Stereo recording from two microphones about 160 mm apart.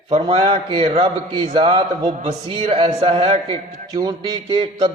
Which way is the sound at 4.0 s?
25° right (ahead or behind).